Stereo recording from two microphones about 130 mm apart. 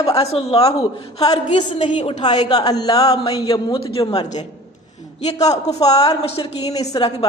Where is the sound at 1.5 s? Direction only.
65° left (ahead or behind).